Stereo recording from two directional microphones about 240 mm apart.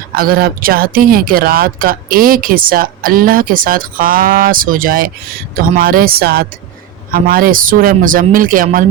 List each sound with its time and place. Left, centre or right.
0.2 s speech: right